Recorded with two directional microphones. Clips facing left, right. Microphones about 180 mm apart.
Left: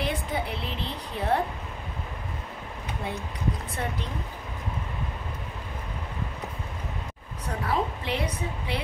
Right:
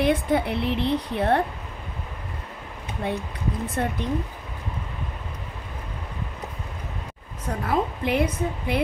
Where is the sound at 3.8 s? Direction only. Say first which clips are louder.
Right 8 dB; 55° right (ahead or behind).